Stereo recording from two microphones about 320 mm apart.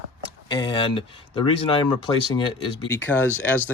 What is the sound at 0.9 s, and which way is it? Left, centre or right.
Speech, centre.